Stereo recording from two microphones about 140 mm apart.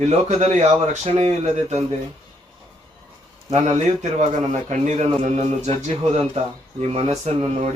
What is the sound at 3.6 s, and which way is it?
A man's voice, 55° right (ahead or behind).